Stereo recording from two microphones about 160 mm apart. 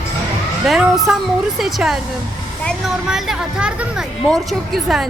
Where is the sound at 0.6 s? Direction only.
Centre (ahead or behind).